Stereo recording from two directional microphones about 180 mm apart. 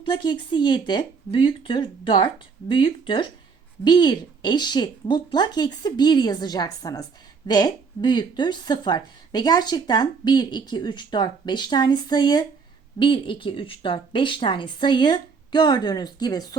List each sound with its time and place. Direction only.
0.0 s a woman's voice: 25° left (ahead or behind)